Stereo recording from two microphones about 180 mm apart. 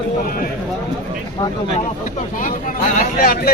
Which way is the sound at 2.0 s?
45° left (ahead or behind).